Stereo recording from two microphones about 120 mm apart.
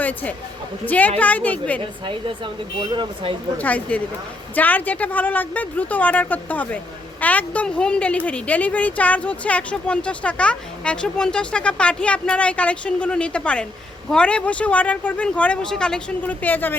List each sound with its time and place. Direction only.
0.0 s speech: 15° left (ahead or behind)
2.9 s speech: 40° right (ahead or behind)
3.6 s speech: 15° left (ahead or behind)